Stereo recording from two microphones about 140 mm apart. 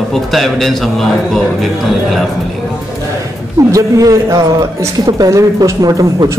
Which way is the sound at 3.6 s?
25° right (ahead or behind).